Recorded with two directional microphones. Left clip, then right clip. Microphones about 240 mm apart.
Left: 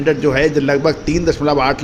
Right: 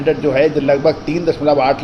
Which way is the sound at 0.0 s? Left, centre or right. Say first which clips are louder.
Right 1 dB; left.